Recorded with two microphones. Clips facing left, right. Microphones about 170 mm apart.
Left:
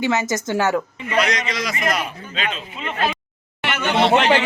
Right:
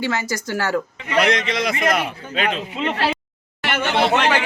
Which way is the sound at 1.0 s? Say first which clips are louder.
Right 4 dB; 60° right (ahead or behind).